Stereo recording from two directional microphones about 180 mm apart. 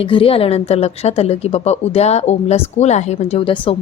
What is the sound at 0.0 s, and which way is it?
A woman's voice, 30° left (ahead or behind).